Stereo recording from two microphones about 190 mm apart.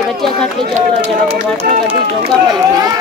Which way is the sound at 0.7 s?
35° right (ahead or behind).